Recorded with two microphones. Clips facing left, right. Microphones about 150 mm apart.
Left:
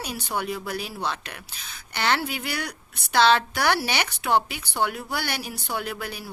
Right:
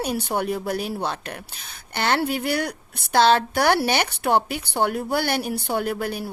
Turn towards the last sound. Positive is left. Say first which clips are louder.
# right 6 dB
turn(degrees=-50)  # may be behind; listen again after turning